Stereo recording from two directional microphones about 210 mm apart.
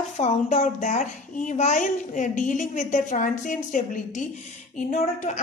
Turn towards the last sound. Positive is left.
turn(degrees=35)  # may be behind; listen again after turning